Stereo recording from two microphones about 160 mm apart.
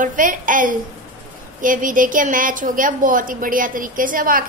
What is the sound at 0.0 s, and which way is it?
A woman's voice, 55° right (ahead or behind).